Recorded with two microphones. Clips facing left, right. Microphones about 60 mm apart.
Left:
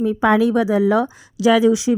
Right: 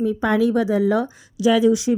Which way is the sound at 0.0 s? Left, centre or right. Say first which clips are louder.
Left 3 dB; left.